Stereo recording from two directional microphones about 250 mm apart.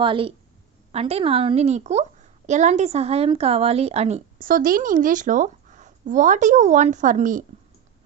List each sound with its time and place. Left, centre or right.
0.0 s speech: right